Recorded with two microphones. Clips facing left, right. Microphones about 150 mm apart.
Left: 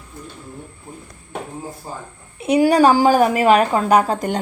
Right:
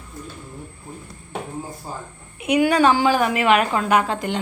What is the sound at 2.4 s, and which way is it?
A woman's voice, 35° left (ahead or behind).